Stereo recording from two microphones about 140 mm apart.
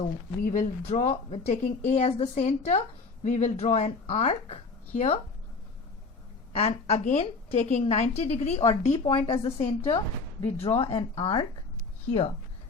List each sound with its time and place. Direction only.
0.0 s a woman's voice: 65° left (ahead or behind); by 5.2 s 45° left (ahead or behind)
6.6 s a woman's voice: 45° left (ahead or behind)